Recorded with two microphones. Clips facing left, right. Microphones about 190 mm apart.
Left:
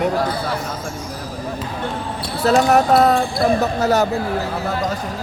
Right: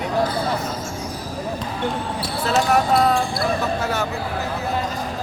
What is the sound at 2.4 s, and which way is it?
Speech, 40° left (ahead or behind).